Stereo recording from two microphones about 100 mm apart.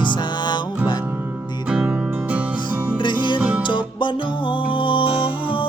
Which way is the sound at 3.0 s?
50° left (ahead or behind).